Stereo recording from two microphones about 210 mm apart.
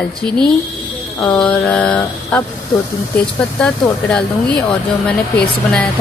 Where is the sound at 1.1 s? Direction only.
5° left (ahead or behind).